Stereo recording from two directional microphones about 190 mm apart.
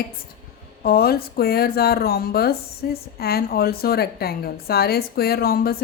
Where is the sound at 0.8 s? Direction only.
55° left (ahead or behind).